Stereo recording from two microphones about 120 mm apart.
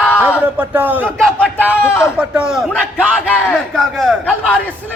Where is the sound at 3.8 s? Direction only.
5° left (ahead or behind).